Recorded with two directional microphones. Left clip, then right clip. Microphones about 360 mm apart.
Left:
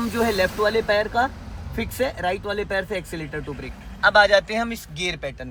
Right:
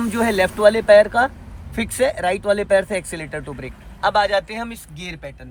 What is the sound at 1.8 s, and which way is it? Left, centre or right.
Speech, right.